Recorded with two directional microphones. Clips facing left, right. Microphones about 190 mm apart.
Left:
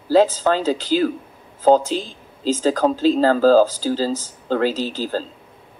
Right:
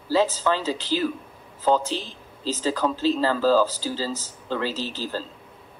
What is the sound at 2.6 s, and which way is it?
Speech, 45° left (ahead or behind).